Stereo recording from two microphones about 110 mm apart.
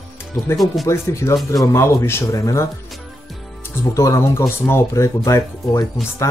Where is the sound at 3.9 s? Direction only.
30° left (ahead or behind).